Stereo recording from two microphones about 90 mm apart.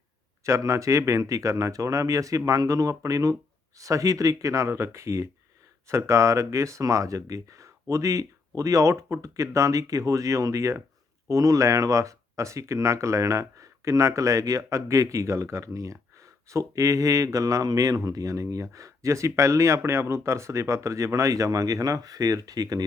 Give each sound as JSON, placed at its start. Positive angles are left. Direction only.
{"t": 0.4, "sound": "speech", "side_deg": -35}